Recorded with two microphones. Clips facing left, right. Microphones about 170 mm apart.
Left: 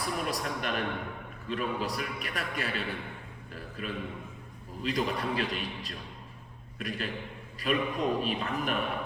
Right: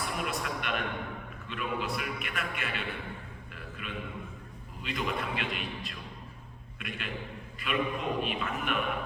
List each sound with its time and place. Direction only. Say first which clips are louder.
0.0 s a man's voice: left 2 dB; 35° left (ahead or behind)
3.5 s a sound: left 5 dB; 35° left (ahead or behind)
4.8 s a man's voice: left 3 dB; 35° left (ahead or behind)